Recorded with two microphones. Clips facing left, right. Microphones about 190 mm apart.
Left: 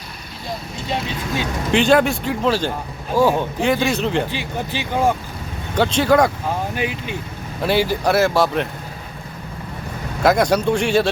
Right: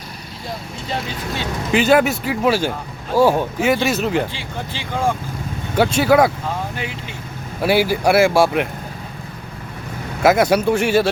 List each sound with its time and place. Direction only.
1.7 s speech: 5° right (ahead or behind)
4.3 s speech: 15° left (ahead or behind)
5.7 s speech: 10° right (ahead or behind)
6.7 s speech: 15° left (ahead or behind)
7.6 s speech: 10° right (ahead or behind)
10.2 s speech: 5° right (ahead or behind)